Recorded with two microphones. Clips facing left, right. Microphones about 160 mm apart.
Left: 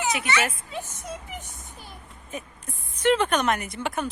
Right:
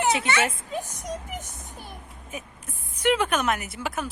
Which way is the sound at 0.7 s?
40° right (ahead or behind).